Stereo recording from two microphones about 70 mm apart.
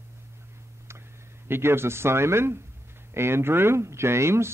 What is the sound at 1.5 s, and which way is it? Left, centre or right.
A man's voice, right.